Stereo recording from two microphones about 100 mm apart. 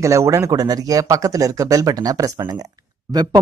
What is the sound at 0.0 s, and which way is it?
Speech, 30° right (ahead or behind).